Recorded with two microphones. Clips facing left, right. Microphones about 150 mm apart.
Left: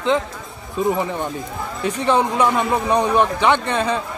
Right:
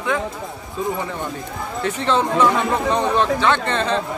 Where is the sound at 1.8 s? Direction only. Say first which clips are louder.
Left 2 dB; 15° left (ahead or behind).